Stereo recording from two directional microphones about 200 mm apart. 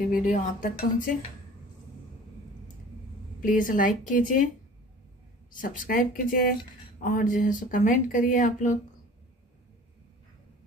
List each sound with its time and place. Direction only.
0.1 s speech: 40° left (ahead or behind)
3.4 s speech: 40° left (ahead or behind)
5.5 s speech: 40° left (ahead or behind)